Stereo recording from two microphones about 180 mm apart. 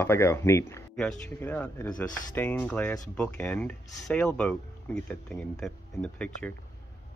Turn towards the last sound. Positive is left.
turn(degrees=5)  # may be behind; listen again after turning